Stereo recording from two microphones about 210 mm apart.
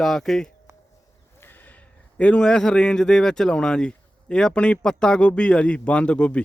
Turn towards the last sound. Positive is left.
turn(degrees=5)  # may be behind; listen again after turning